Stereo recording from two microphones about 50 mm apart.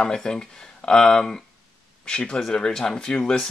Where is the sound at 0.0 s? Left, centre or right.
Centre.